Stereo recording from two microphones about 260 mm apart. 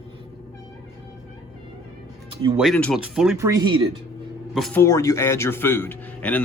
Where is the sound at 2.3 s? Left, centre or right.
Centre.